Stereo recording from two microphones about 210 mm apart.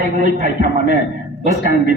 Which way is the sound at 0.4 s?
35° right (ahead or behind).